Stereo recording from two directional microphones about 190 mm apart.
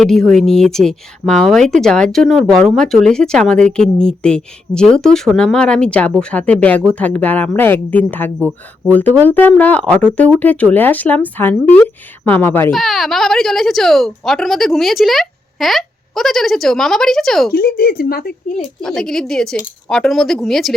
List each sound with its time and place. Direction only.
0.0 s speech: 5° left (ahead or behind)
12.7 s speech: centre (ahead or behind)
17.5 s speech: 50° left (ahead or behind)
18.8 s speech: 5° left (ahead or behind)